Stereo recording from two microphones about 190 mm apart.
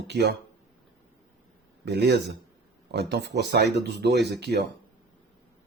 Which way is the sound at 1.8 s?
60° right (ahead or behind).